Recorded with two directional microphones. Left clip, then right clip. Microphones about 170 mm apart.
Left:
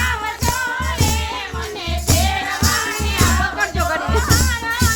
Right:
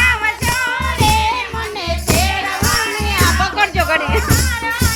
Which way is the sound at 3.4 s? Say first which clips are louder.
Right 4 dB; 15° right (ahead or behind).